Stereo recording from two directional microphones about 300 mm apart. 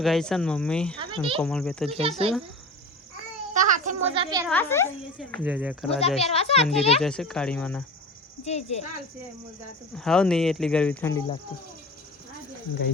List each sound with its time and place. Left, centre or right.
0.0 s speech: centre
1.9 s speech: centre
3.5 s a sound: right
4.4 s speech: centre
6.0 s a child's voice: centre
7.0 s speech: centre
8.4 s a child's voice: left
9.9 s speech: centre